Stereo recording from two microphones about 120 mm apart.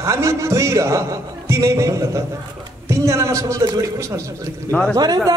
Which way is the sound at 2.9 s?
25° right (ahead or behind).